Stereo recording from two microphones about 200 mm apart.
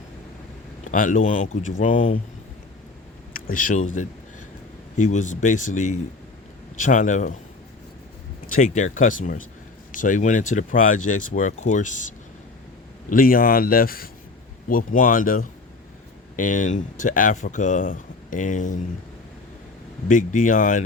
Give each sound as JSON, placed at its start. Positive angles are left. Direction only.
{"t": 0.9, "sound": "speech", "side_deg": 40}
{"t": 3.3, "sound": "speech", "side_deg": 45}
{"t": 4.9, "sound": "speech", "side_deg": 35}
{"t": 8.5, "sound": "speech", "side_deg": 40}
{"t": 20.1, "sound": "speech", "side_deg": 40}